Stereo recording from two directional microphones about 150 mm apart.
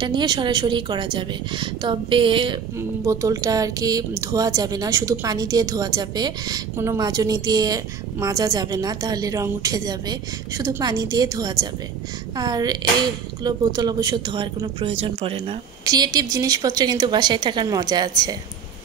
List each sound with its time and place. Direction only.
0.0 s a woman's voice: 30° right (ahead or behind)
3.1 s a woman's voice: 20° right (ahead or behind); by 15.5 s 35° right (ahead or behind)
15.8 s speech: 25° right (ahead or behind)